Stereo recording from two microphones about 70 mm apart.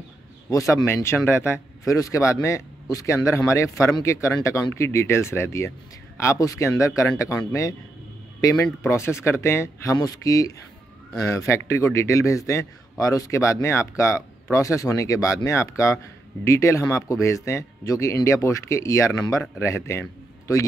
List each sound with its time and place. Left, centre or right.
0.5 s a man's voice: left
0.8 s speech: left
1.9 s a man's voice: left
7.2 s a man's voice: left
9.9 s speech: left
11.2 s a man's voice: left